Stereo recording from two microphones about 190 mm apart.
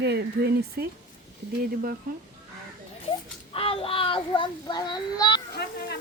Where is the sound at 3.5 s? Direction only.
30° left (ahead or behind).